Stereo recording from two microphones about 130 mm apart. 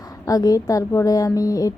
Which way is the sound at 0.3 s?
25° left (ahead or behind).